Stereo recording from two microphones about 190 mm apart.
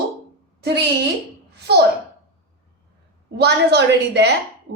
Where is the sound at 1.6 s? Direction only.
60° right (ahead or behind).